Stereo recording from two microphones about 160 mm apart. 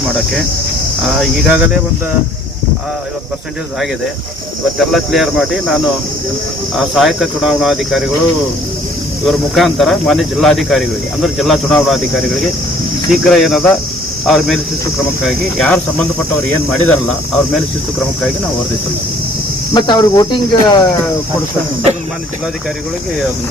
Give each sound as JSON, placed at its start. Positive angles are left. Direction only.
{"t": 1.0, "sound": "speech", "side_deg": 0}
{"t": 4.8, "sound": "speech", "side_deg": 0}
{"t": 9.2, "sound": "speech", "side_deg": 0}
{"t": 19.7, "sound": "speech", "side_deg": 30}